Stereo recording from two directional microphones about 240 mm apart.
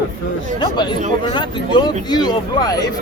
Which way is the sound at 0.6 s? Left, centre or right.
Centre.